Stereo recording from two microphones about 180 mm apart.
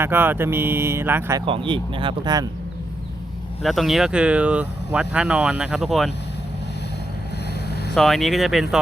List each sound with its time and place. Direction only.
0.0 s speech: 10° right (ahead or behind)
1.4 s speech: 30° right (ahead or behind)
3.6 s speech: centre (ahead or behind)
7.7 s vehicle: 65° left (ahead or behind)
7.9 s speech: centre (ahead or behind)